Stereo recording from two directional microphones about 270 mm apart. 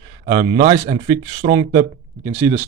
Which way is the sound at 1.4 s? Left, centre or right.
Right.